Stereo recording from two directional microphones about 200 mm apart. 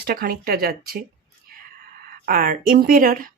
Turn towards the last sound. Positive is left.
turn(degrees=-45)  # may be behind; listen again after turning